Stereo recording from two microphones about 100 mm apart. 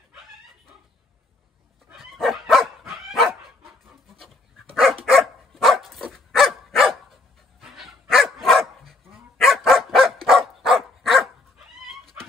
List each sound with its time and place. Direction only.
2.0 s dog: centre (ahead or behind)